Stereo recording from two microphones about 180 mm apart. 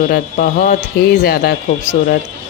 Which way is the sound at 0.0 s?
50° left (ahead or behind).